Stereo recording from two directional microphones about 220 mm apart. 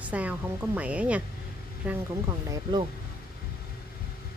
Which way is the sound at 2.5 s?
20° right (ahead or behind).